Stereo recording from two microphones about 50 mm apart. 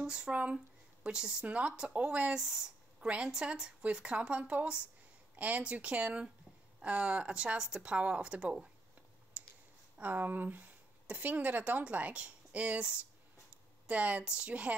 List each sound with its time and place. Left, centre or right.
0.0 s speech: centre
0.3 s a woman's voice: right
1.0 s a woman's voice: centre
5.3 s a sound: right
5.6 s a woman's voice: right
9.4 s clicking: right
9.9 s a woman's voice: right